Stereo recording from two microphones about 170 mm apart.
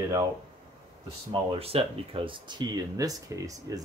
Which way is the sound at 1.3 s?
35° right (ahead or behind).